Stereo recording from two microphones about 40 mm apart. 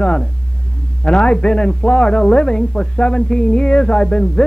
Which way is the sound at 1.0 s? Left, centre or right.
Left.